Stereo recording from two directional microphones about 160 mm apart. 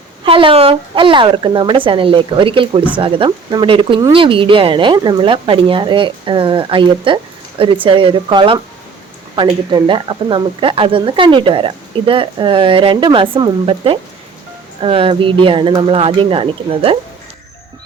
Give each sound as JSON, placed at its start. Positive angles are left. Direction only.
{"t": 0.3, "sound": "speech", "side_deg": -35}